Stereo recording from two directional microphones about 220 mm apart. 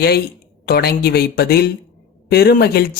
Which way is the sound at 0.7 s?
45° left (ahead or behind).